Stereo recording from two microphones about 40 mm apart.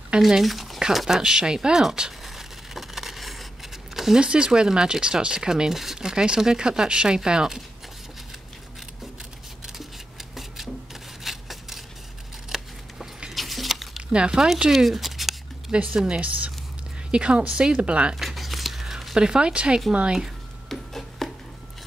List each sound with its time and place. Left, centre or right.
0.4 s speech: centre
0.7 s speech: centre
2.2 s a sound: centre
4.2 s speech: right
5.7 s speech: centre
5.9 s speech: centre
11.2 s a sound: centre
14.1 s speech: right
14.7 s speech: centre
15.7 s speech: right
17.1 s speech: right
18.2 s a sound: centre
19.1 s speech: right
20.7 s rub: centre